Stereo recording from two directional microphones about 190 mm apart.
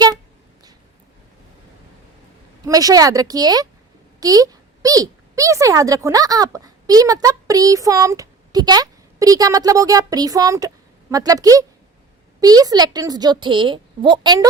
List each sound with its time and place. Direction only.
2.6 s a woman's voice: 20° right (ahead or behind)